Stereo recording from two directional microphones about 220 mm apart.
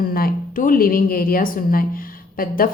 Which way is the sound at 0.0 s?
40° left (ahead or behind).